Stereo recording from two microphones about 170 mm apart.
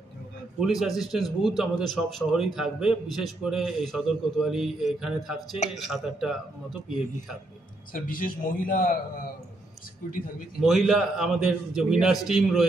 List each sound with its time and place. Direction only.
0.6 s a man's voice: centre (ahead or behind)
7.9 s a man's voice: 55° left (ahead or behind)
10.6 s a man's voice: centre (ahead or behind)